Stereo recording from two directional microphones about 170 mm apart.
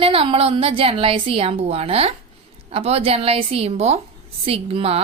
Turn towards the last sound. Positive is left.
turn(degrees=-35)  # may be behind; listen again after turning